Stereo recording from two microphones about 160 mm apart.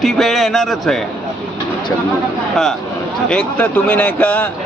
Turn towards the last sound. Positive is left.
turn(degrees=10)  # may be behind; listen again after turning